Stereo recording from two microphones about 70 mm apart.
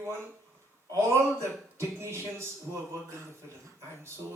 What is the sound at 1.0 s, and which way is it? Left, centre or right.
A man's voice, right.